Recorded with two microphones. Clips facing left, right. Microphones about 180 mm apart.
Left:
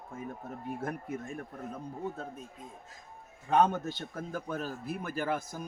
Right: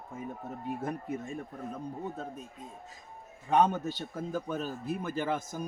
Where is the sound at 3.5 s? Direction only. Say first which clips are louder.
Even; 15° right (ahead or behind).